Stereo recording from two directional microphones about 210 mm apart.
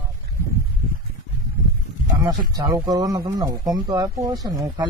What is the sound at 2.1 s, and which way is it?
Speech, 20° right (ahead or behind).